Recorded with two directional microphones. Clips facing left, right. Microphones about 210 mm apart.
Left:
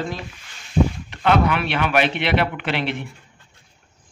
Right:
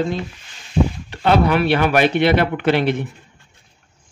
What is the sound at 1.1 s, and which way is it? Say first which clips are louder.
Speech: right 3 dB; 35° right (ahead or behind).